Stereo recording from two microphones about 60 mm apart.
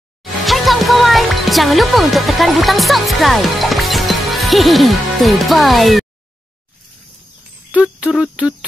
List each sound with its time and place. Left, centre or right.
0.5 s music: centre
7.7 s speech: centre